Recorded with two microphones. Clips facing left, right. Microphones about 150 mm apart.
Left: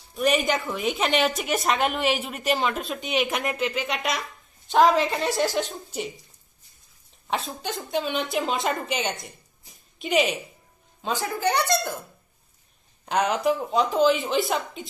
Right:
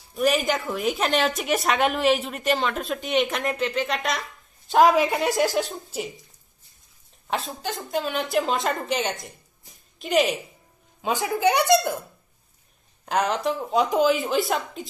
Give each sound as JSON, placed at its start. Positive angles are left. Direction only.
{"t": 0.1, "sound": "speech", "side_deg": 0}
{"t": 7.2, "sound": "speech", "side_deg": 0}
{"t": 11.1, "sound": "speech", "side_deg": -20}
{"t": 13.0, "sound": "speech", "side_deg": 0}